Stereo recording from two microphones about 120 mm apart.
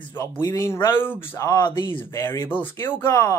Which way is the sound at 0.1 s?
30° left (ahead or behind).